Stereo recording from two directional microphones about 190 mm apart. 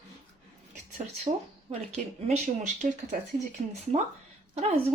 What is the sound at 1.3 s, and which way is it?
Speech, 30° right (ahead or behind).